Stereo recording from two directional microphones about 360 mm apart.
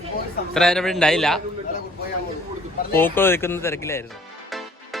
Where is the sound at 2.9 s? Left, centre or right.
Centre.